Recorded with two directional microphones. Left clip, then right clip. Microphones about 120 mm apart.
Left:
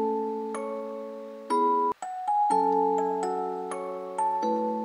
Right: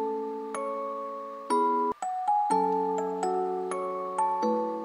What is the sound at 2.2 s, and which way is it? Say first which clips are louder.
Music: left 2 dB; 10° right (ahead or behind).